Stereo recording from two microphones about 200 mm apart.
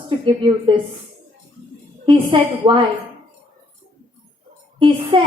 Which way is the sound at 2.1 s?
25° right (ahead or behind).